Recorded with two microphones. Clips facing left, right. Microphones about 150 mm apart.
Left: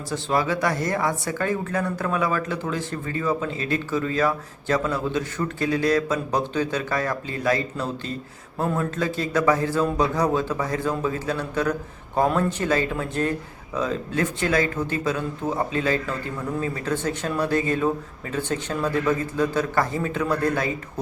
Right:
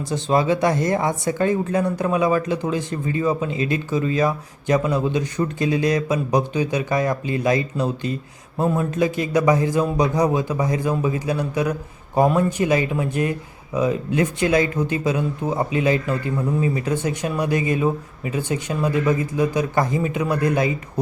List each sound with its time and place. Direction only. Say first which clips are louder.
0.1 s speech: right 4 dB; 20° right (ahead or behind)